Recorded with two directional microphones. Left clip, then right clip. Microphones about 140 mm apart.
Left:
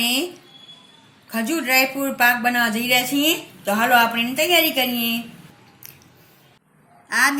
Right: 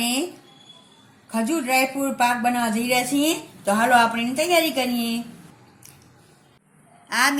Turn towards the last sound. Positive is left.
turn(degrees=-15)  # may be behind; listen again after turning